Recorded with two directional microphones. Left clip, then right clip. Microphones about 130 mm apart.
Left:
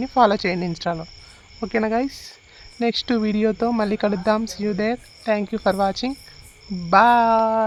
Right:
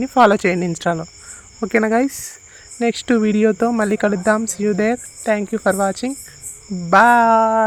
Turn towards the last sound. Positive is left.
turn(degrees=-20)  # may be behind; listen again after turning